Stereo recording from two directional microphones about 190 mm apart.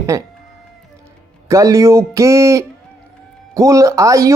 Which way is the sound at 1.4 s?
15° right (ahead or behind).